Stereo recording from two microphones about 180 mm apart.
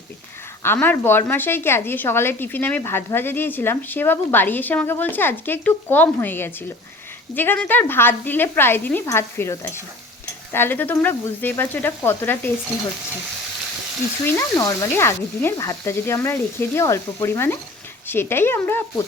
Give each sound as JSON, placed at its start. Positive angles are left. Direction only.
{"t": 0.6, "sound": "a woman's voice", "side_deg": 10}
{"t": 14.3, "sound": "a woman's voice", "side_deg": 20}